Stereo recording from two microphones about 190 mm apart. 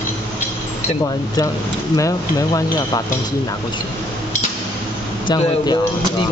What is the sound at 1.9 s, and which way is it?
Speech, 20° left (ahead or behind).